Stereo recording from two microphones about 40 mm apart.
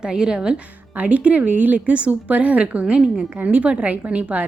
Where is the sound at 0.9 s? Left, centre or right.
Right.